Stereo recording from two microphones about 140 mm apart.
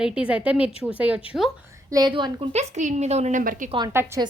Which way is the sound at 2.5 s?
55° right (ahead or behind).